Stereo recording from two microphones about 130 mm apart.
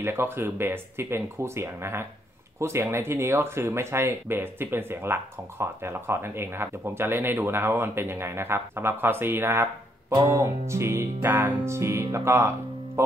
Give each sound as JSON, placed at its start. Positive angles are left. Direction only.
{"t": 0.0, "sound": "speech", "side_deg": -20}